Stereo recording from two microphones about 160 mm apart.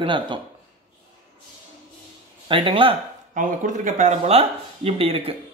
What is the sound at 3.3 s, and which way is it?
Speech, 55° right (ahead or behind).